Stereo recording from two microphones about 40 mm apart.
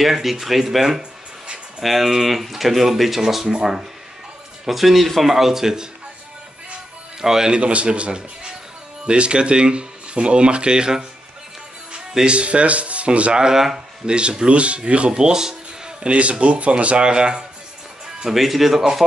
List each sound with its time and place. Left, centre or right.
0.0 s speech: centre
4.6 s speech: centre
7.2 s speech: centre
7.5 s speech: right
12.2 s speech: right
13.4 s speech: centre
14.0 s speech: right
15.1 s music: centre
16.1 s speech: right
18.2 s speech: centre